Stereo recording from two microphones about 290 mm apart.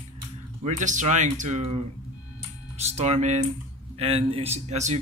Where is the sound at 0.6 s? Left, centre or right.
Right.